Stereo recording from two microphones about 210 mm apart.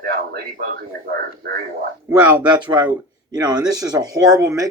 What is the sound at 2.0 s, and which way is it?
Speech, 20° right (ahead or behind).